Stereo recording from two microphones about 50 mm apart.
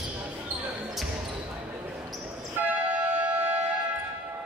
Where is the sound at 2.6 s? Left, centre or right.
Right.